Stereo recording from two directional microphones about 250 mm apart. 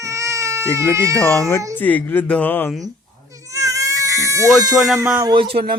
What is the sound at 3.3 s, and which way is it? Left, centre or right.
Goat, centre.